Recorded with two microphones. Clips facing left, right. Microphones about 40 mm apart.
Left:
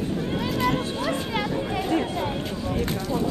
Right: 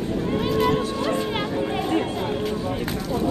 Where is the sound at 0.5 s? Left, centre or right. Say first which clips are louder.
Right 3 dB; centre.